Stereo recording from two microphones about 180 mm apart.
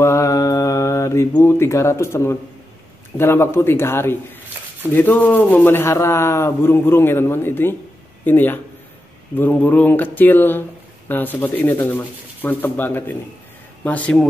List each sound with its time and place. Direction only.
0.0 s mantra: 15° left (ahead or behind)
3.2 s speech: 15° left (ahead or behind)